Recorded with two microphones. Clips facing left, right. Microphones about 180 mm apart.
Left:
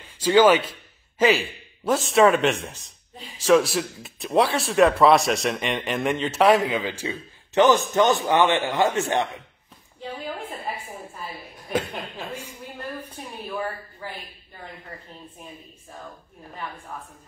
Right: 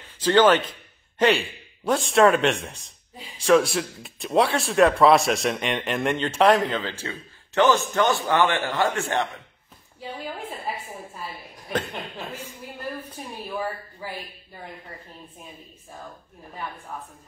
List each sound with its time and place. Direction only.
0.0 s a man's voice: 10° left (ahead or behind)
9.9 s a woman's voice: 10° right (ahead or behind)
11.7 s a man's voice: 10° left (ahead or behind)